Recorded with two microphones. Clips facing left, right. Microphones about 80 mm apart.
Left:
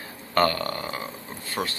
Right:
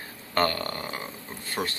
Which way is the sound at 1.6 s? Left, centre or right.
Centre.